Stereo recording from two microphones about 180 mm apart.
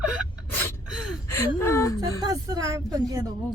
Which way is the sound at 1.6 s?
15° left (ahead or behind).